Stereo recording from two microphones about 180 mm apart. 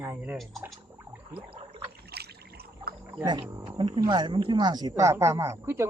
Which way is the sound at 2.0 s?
65° right (ahead or behind).